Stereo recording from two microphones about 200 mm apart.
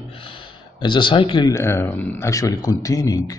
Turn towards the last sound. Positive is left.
turn(degrees=15)  # may be behind; listen again after turning